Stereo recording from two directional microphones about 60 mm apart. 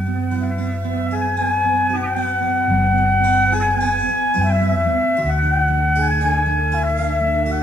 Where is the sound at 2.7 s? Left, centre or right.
Left.